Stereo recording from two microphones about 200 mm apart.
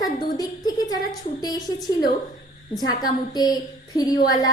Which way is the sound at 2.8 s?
20° left (ahead or behind).